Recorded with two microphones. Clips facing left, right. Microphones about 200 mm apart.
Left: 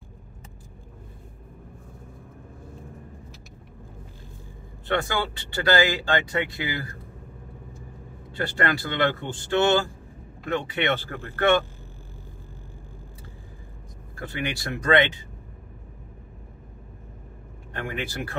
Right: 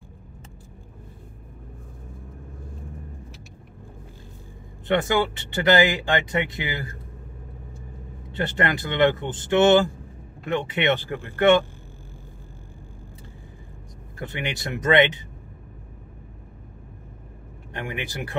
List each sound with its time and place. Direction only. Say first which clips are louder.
4.8 s speech: right 5 dB; 20° right (ahead or behind)
8.3 s speech: right 1 dB; 20° right (ahead or behind)
14.1 s speech: even; 20° right (ahead or behind)
17.7 s speech: even; 15° right (ahead or behind)